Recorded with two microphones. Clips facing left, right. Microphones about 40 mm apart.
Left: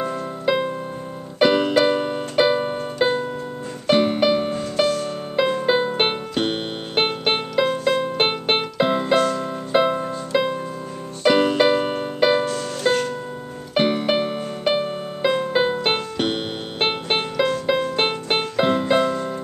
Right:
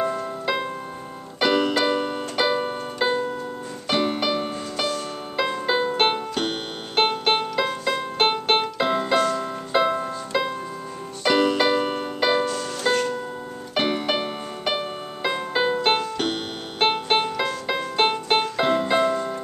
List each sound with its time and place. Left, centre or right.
0.0 s music: centre
1.4 s keyboard: centre
3.8 s music: centre